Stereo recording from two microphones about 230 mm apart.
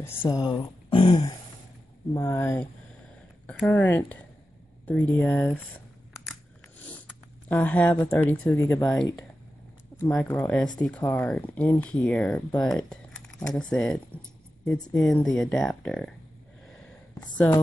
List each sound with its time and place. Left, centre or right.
0.0 s speech: centre
7.4 s speech: centre